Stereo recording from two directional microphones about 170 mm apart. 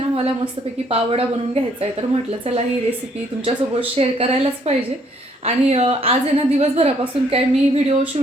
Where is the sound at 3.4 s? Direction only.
35° right (ahead or behind).